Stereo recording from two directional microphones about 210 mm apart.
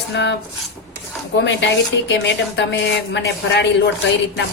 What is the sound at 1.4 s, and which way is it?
A woman's voice, 55° left (ahead or behind).